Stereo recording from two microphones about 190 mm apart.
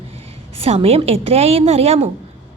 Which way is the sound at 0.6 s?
30° right (ahead or behind).